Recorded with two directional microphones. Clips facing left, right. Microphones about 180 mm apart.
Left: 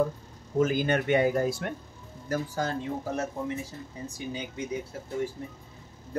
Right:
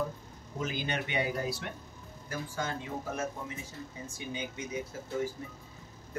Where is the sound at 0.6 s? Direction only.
50° left (ahead or behind).